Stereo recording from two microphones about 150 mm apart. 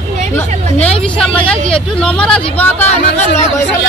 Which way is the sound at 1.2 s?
10° left (ahead or behind).